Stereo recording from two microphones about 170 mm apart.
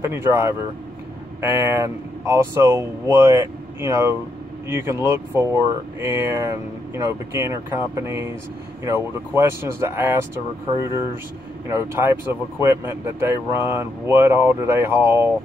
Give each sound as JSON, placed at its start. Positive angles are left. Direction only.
{"t": 0.0, "sound": "speech", "side_deg": -15}
{"t": 11.9, "sound": "speech", "side_deg": -15}